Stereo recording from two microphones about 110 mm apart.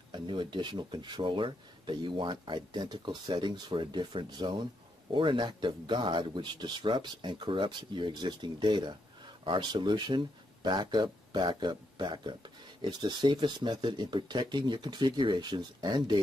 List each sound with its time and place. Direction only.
0.1 s speech: 45° right (ahead or behind)